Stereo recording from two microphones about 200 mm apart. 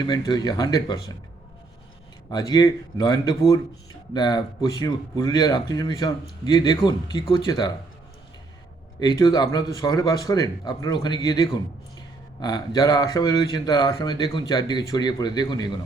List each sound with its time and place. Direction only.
0.0 s speech: 20° left (ahead or behind)
2.3 s speech: 20° left (ahead or behind)
9.0 s speech: 20° left (ahead or behind)